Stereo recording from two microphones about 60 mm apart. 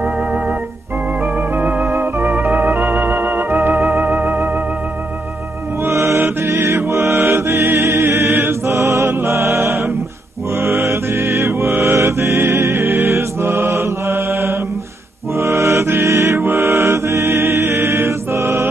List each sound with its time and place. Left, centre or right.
1.6 s music: right
5.9 s music: right
10.6 s mantra: right
11.8 s music: right
13.1 s mantra: right
15.3 s music: right